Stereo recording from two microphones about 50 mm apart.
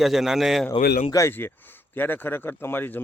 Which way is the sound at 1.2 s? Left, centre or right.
Left.